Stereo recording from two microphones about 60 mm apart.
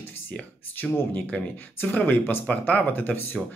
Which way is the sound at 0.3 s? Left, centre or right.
Left.